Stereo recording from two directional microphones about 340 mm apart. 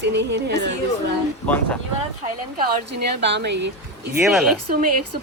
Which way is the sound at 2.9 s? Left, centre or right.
Right.